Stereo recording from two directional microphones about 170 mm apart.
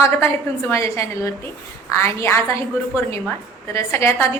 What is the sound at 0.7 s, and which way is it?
A woman's voice, 15° left (ahead or behind).